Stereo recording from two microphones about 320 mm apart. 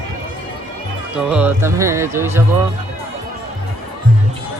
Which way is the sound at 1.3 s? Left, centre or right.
Centre.